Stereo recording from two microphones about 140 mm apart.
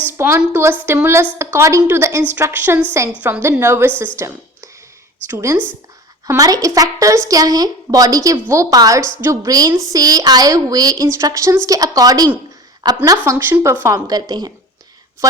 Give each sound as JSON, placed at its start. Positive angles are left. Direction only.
{"t": 0.1, "sound": "a woman's voice", "side_deg": -20}